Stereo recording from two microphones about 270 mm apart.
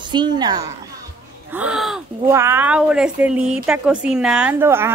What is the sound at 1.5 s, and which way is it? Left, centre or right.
Speech, centre.